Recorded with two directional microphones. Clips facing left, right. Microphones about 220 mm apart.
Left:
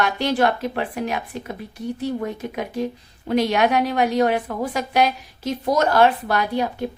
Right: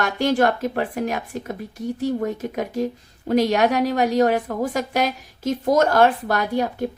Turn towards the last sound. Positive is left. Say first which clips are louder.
# right 1 dB
turn(degrees=-45)  # may be behind; listen again after turning